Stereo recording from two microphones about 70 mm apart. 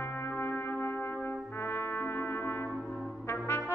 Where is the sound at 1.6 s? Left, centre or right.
Left.